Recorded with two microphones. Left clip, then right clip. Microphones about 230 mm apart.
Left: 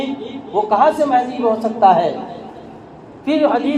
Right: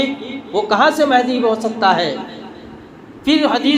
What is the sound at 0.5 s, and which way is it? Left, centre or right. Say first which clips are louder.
Speech: even; right.